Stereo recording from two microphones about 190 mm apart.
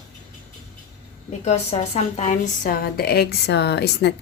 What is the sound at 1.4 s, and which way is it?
Speech, 35° left (ahead or behind).